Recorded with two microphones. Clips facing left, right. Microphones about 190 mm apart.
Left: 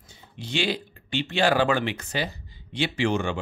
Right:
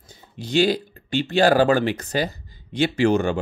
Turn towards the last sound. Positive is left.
turn(degrees=-40)  # may be behind; listen again after turning